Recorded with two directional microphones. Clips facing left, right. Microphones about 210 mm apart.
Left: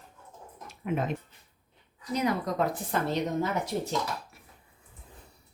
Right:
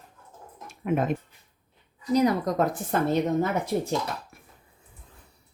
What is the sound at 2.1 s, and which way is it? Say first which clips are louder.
Speech: right 6 dB; 35° right (ahead or behind).